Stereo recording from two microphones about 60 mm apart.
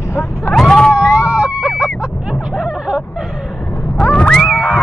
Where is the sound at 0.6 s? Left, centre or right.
Centre.